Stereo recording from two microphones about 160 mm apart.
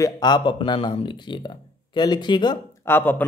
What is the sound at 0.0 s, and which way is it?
Speech, 25° left (ahead or behind).